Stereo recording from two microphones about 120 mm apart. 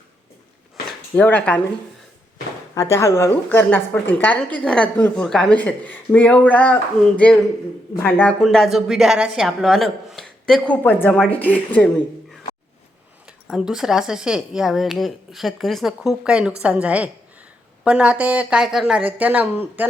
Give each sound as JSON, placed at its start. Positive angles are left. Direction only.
{"t": 1.1, "sound": "speech", "side_deg": 15}
{"t": 2.7, "sound": "speech", "side_deg": 25}
{"t": 8.0, "sound": "speech", "side_deg": 15}
{"t": 8.4, "sound": "speech", "side_deg": 0}
{"t": 13.2, "sound": "speech", "side_deg": -5}